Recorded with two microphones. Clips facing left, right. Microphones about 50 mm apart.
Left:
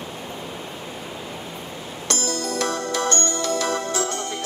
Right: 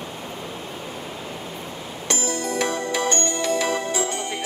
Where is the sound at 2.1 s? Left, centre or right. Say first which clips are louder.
Right 1 dB; centre.